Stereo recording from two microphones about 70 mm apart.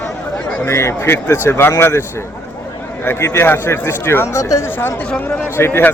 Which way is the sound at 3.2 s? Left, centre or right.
Left.